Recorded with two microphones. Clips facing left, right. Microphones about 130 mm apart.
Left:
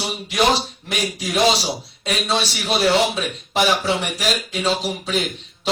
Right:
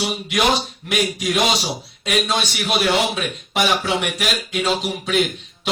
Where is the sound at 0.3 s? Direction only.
30° left (ahead or behind).